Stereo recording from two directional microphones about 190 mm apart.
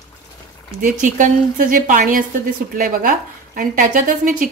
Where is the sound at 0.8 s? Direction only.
40° right (ahead or behind).